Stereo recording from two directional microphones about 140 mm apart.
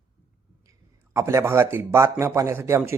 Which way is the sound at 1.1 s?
20° right (ahead or behind).